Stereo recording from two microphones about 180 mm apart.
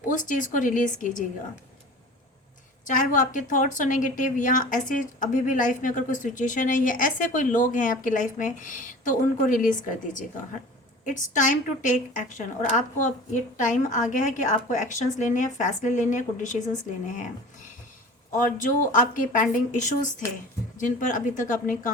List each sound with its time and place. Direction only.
0.1 s a woman's voice: 45° left (ahead or behind)
2.8 s a woman's voice: 45° left (ahead or behind)
18.3 s a woman's voice: 45° left (ahead or behind)